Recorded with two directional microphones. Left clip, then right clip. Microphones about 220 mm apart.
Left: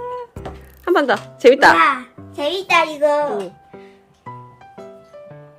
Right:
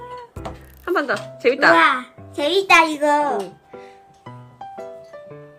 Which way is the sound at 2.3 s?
15° right (ahead or behind).